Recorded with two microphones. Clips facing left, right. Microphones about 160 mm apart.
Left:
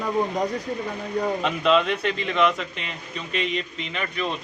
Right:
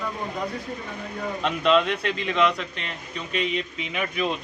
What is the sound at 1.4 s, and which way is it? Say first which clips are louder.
Speech: right 2 dB; centre (ahead or behind).